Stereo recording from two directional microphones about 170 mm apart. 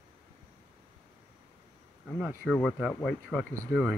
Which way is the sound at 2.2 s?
5° right (ahead or behind).